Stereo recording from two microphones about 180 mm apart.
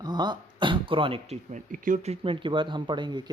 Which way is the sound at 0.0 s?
25° right (ahead or behind).